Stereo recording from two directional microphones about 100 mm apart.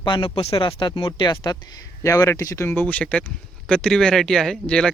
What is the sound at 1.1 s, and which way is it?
Speech, 45° left (ahead or behind).